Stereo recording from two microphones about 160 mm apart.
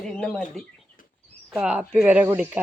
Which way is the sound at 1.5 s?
5° right (ahead or behind).